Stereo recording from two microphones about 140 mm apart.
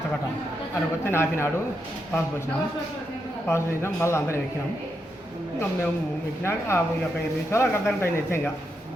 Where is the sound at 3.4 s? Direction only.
20° left (ahead or behind).